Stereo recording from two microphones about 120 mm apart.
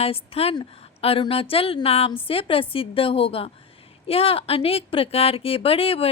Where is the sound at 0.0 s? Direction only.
55° left (ahead or behind).